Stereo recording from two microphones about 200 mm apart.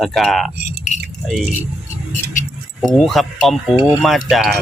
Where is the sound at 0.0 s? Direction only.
Centre (ahead or behind).